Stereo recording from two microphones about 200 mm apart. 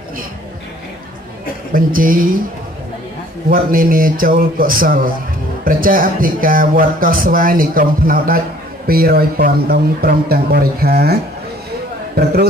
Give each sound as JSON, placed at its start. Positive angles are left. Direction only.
{"t": 1.7, "sound": "speech", "side_deg": -45}
{"t": 3.4, "sound": "speech", "side_deg": -45}